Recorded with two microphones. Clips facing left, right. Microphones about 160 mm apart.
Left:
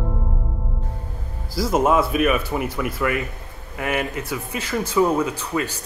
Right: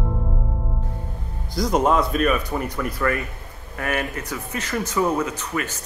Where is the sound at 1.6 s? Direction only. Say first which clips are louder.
Left 1 dB; 5° left (ahead or behind).